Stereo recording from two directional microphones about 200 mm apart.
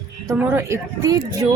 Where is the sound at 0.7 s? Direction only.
20° right (ahead or behind).